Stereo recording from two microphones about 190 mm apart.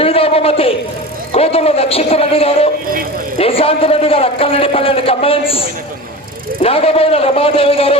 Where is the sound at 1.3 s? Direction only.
30° left (ahead or behind).